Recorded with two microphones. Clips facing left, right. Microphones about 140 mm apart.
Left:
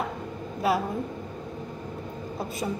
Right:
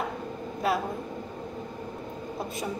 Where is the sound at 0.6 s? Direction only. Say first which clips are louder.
Left 2 dB; 5° left (ahead or behind).